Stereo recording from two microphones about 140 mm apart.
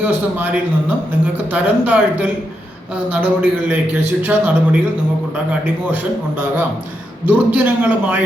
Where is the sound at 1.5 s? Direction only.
10° right (ahead or behind).